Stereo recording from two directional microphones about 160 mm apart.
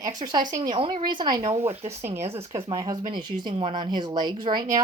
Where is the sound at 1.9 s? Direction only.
15° right (ahead or behind).